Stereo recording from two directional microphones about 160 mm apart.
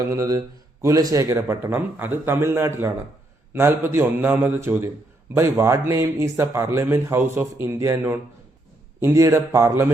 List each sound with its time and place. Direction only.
0.0 s speech: 20° right (ahead or behind)